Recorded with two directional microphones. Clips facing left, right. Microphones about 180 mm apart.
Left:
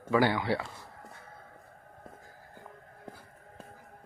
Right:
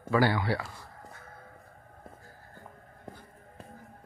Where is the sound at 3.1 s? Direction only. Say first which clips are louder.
Right 2 dB; 5° left (ahead or behind).